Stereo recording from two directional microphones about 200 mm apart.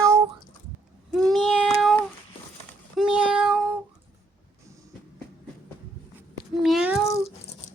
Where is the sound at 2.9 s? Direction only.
5° right (ahead or behind).